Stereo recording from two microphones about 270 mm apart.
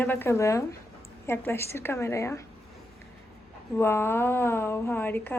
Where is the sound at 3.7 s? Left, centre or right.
Centre.